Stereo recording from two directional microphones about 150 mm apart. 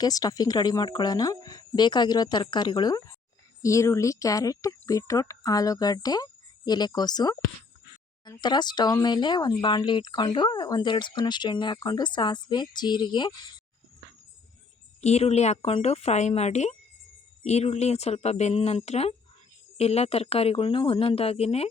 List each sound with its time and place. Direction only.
0.0 s speech: 25° left (ahead or behind)
15.0 s speech: 45° left (ahead or behind)